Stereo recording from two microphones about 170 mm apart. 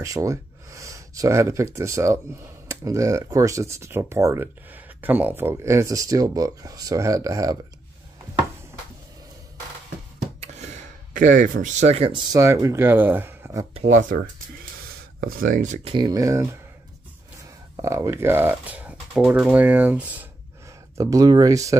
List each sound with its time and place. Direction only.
0.0 s speech: 20° right (ahead or behind)
10.4 s speech: 40° right (ahead or behind); by 13.7 s 15° right (ahead or behind)
13.7 s speech: 45° right (ahead or behind)
15.1 s speech: 60° right (ahead or behind)
15.9 s speech: 25° right (ahead or behind)
17.7 s speech: 15° right (ahead or behind)